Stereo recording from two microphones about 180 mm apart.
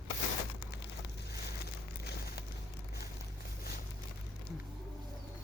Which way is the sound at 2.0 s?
65° left (ahead or behind).